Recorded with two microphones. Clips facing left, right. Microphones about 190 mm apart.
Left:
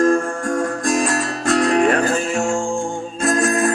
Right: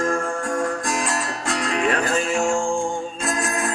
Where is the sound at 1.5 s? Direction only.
50° left (ahead or behind).